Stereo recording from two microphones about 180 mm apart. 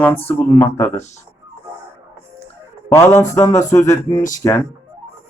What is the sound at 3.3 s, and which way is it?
Speech, 15° left (ahead or behind).